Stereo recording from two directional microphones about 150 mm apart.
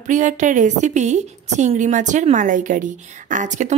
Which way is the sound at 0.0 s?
55° right (ahead or behind).